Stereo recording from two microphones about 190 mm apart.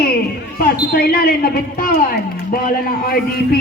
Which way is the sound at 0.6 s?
55° left (ahead or behind).